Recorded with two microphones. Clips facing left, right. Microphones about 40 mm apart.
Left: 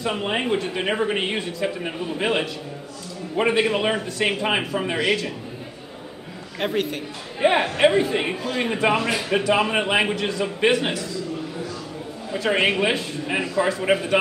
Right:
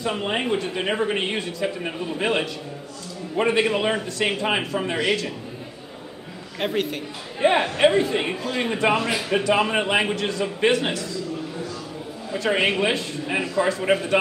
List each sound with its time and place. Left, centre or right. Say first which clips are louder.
0.0 s a man's voice: left 1 dB; centre
6.6 s a man's voice: left 1 dB; centre
12.3 s a man's voice: left 1 dB; centre